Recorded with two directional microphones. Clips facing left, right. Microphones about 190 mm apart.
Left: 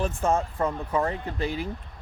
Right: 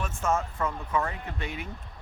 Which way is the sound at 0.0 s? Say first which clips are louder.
Left 4 dB; 35° left (ahead or behind).